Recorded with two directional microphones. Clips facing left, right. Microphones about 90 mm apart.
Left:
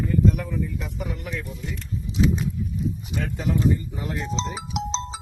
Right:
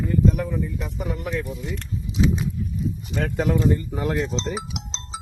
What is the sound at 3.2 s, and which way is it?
Speech, 60° right (ahead or behind).